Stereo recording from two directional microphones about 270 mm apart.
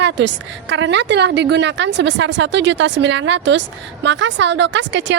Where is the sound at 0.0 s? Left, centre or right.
Right.